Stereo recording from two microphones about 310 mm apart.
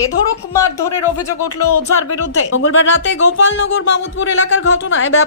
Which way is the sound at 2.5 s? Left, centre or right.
Left.